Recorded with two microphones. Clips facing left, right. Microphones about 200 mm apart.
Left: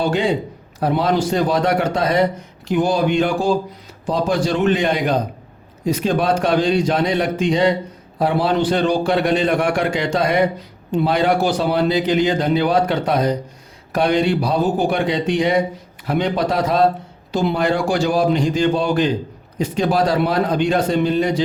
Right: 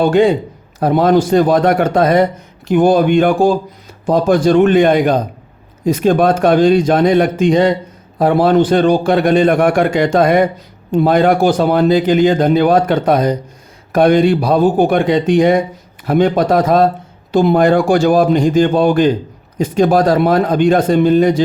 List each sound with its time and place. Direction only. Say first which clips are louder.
0.0 s a man's voice: right 7 dB; 50° right (ahead or behind)